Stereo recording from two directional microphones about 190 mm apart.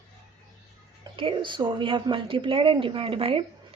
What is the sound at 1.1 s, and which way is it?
Speech, 25° right (ahead or behind).